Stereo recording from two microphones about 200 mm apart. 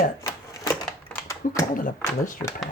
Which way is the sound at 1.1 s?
15° left (ahead or behind).